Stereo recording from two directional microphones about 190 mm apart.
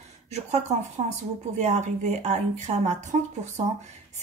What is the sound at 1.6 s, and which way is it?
Speech, 40° right (ahead or behind).